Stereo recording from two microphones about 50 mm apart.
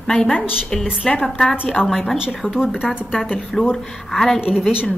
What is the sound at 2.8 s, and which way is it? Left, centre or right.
Speech, centre.